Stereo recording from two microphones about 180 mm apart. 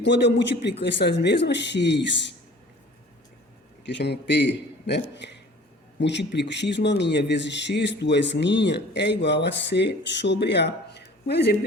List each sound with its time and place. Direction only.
0.0 s speech: 75° left (ahead or behind)
3.8 s speech: 70° left (ahead or behind)